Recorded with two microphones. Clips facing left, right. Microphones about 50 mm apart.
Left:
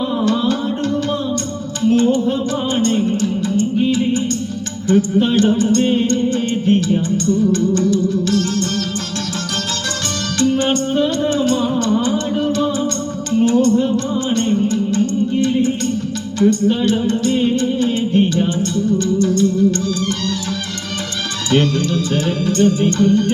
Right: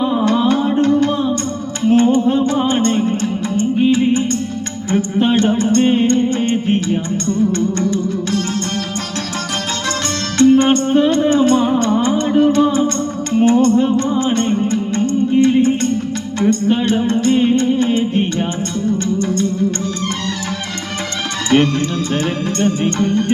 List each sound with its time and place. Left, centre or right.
0.0 s music: right
4.9 s speech: right
5.5 s music: right
10.3 s music: right
21.5 s music: right